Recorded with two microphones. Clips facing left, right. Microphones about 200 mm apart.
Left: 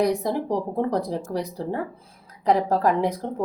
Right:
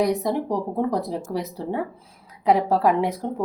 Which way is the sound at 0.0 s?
Centre (ahead or behind).